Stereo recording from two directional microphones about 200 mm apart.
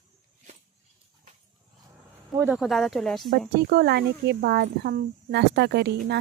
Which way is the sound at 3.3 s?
55° right (ahead or behind).